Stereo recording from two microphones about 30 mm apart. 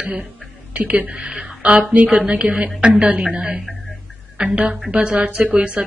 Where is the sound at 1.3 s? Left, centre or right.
Right.